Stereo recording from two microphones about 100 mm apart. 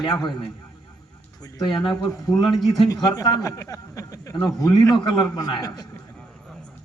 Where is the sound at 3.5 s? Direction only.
35° left (ahead or behind).